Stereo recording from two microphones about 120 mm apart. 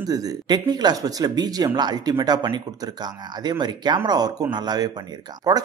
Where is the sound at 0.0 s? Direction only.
30° right (ahead or behind).